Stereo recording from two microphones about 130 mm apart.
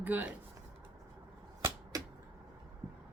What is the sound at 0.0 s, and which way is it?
Speech, 15° right (ahead or behind).